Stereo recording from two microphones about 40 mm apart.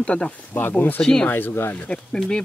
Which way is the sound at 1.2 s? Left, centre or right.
Left.